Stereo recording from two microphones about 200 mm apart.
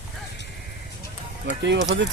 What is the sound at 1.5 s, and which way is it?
Speech, 60° right (ahead or behind).